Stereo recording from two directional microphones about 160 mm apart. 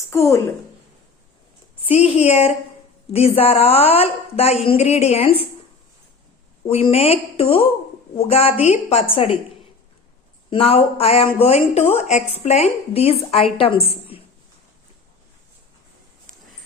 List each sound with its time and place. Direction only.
0.1 s a woman's voice: 20° left (ahead or behind)
1.8 s speech: 35° left (ahead or behind)
6.7 s speech: 40° left (ahead or behind)
10.5 s speech: 35° left (ahead or behind)